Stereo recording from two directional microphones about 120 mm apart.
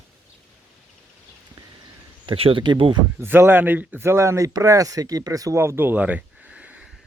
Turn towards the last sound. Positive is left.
turn(degrees=-10)  # may be behind; listen again after turning